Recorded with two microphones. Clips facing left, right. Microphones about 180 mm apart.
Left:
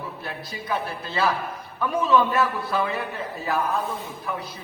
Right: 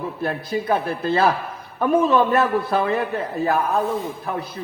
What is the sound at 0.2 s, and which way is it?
A man's voice, 50° right (ahead or behind).